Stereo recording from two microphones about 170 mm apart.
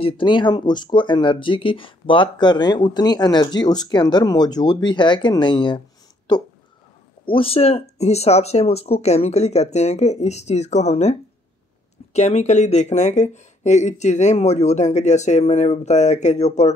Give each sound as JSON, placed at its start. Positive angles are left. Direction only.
{"t": 0.0, "sound": "speech", "side_deg": 30}
{"t": 7.2, "sound": "speech", "side_deg": 35}